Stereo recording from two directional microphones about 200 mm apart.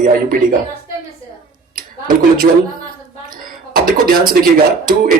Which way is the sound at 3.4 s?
45° right (ahead or behind).